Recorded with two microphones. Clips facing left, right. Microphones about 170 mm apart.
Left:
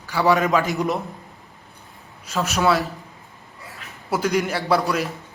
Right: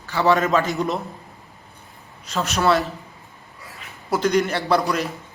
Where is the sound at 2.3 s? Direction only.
5° left (ahead or behind).